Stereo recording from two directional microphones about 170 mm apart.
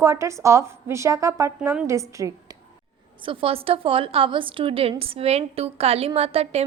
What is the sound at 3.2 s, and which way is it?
A woman's voice, 30° right (ahead or behind).